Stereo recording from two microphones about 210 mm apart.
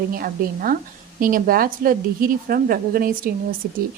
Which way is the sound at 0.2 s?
40° right (ahead or behind).